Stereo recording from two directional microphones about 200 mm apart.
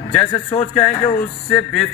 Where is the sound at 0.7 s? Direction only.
5° left (ahead or behind).